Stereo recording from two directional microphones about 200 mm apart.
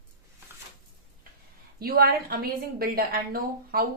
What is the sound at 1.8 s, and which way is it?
A woman's voice, 50° right (ahead or behind).